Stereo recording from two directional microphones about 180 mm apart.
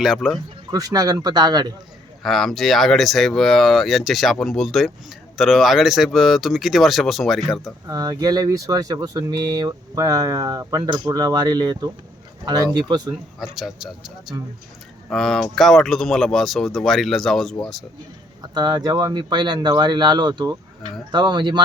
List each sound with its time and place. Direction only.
0.0 s speech: centre (ahead or behind)
0.7 s speech: 20° right (ahead or behind)
2.2 s speech: centre (ahead or behind)
7.9 s speech: 20° right (ahead or behind)
13.4 s speech: centre (ahead or behind)
18.5 s speech: 20° right (ahead or behind)